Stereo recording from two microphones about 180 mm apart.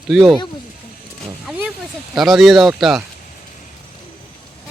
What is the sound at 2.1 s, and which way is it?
Speech, centre (ahead or behind).